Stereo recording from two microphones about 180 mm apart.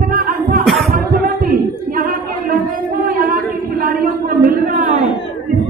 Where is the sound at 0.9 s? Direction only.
50° right (ahead or behind).